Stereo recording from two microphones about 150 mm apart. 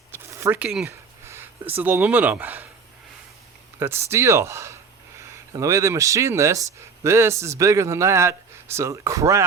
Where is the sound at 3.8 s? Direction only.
15° right (ahead or behind).